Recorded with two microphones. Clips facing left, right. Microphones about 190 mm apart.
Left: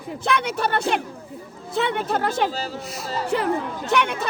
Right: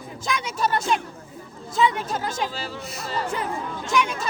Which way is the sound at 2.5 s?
40° left (ahead or behind).